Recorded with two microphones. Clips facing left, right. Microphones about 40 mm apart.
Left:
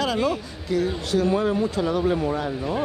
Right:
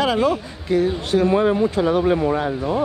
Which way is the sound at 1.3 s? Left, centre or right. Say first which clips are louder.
Right 5 dB; right.